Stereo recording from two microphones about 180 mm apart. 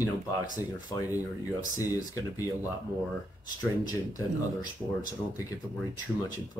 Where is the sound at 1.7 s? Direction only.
20° left (ahead or behind).